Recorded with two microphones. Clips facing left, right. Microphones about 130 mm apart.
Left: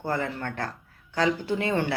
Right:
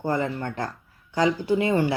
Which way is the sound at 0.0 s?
15° right (ahead or behind).